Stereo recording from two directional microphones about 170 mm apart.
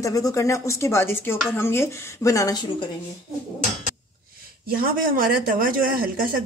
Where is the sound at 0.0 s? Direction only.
20° left (ahead or behind).